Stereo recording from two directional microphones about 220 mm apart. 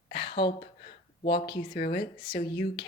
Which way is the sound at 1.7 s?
40° left (ahead or behind).